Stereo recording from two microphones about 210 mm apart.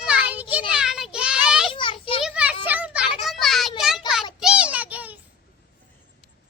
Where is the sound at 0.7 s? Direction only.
5° right (ahead or behind).